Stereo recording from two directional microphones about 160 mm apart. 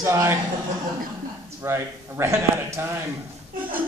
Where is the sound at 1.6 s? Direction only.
15° right (ahead or behind).